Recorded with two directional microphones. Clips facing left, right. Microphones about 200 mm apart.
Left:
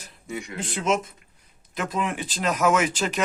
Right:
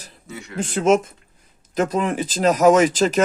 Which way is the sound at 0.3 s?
15° left (ahead or behind).